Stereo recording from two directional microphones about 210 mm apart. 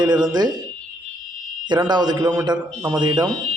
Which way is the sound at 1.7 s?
20° right (ahead or behind).